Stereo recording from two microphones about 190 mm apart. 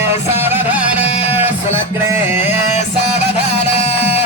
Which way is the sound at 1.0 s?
35° left (ahead or behind).